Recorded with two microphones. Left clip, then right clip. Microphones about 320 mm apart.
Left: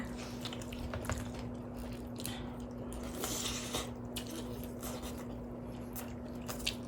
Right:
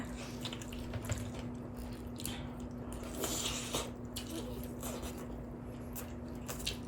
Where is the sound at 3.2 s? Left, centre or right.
Centre.